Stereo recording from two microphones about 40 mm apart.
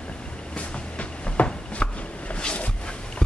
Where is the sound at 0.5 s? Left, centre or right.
Left.